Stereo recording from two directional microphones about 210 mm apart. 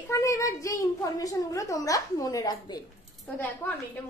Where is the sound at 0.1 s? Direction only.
15° left (ahead or behind).